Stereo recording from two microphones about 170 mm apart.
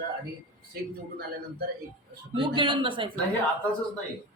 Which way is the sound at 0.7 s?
65° right (ahead or behind).